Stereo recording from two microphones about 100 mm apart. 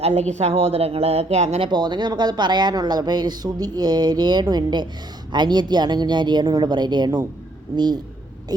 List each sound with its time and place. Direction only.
0.0 s a woman's voice: 90° right
1.7 s speech: 45° right (ahead or behind)